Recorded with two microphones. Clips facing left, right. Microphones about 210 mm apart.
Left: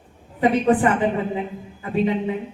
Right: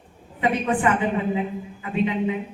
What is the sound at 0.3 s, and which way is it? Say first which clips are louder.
Speech: left 5 dB; 35° left (ahead or behind).